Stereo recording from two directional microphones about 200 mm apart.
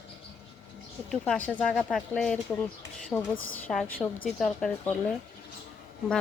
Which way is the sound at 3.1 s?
15° left (ahead or behind).